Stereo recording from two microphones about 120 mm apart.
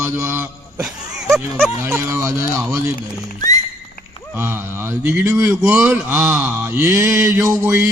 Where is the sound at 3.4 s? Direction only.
30° left (ahead or behind).